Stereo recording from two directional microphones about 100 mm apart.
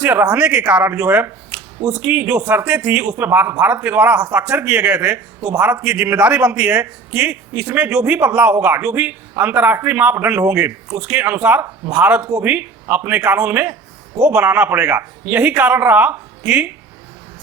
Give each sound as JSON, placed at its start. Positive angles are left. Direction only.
{"t": 0.0, "sound": "a man's voice", "side_deg": -20}